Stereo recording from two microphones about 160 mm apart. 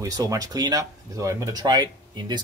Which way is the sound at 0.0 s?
20° right (ahead or behind).